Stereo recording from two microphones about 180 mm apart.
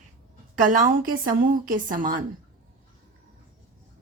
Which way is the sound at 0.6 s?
45° right (ahead or behind).